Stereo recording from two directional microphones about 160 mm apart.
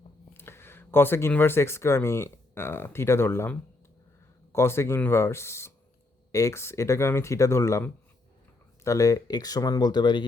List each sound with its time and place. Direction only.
0.3 s speech: 15° left (ahead or behind)